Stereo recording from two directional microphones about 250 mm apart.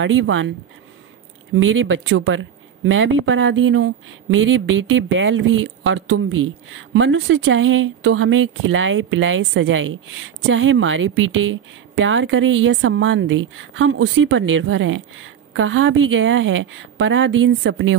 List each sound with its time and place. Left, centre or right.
0.0 s speech: right
1.5 s speech: right